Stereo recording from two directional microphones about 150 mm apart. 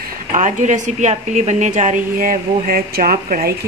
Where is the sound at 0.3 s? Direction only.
55° right (ahead or behind).